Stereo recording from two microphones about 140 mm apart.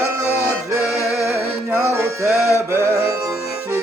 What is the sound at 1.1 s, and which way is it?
Music, 5° right (ahead or behind).